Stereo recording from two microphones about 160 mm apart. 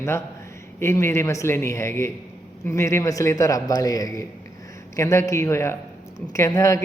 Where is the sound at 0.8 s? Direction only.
15° left (ahead or behind).